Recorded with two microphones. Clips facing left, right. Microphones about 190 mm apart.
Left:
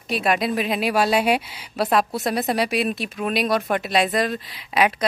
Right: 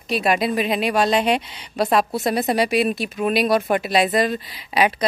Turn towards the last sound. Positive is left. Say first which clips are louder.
# right 1 dB
turn(degrees=0)  # may be behind; listen again after turning